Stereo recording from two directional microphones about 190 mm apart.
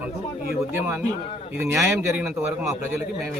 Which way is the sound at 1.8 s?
5° right (ahead or behind).